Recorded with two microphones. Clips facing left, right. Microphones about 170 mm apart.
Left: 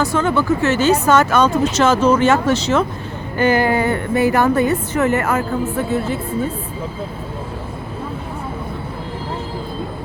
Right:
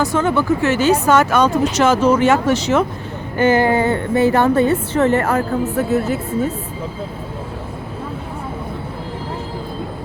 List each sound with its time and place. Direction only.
0.0 s a woman's voice: 20° right (ahead or behind); by 6.5 s 45° right (ahead or behind)